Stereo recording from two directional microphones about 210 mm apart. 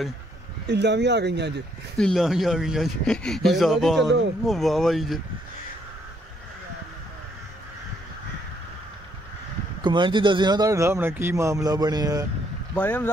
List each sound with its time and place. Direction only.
0.7 s speech: 55° right (ahead or behind)
2.0 s speech: centre (ahead or behind)
9.8 s a man's voice: 20° right (ahead or behind)
12.7 s speech: 10° left (ahead or behind)